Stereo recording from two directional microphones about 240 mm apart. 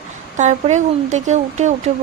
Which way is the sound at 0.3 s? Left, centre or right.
Right.